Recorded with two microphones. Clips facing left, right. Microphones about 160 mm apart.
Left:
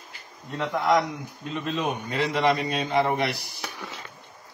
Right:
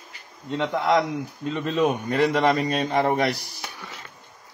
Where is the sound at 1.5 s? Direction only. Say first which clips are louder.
Right 5 dB; 40° right (ahead or behind).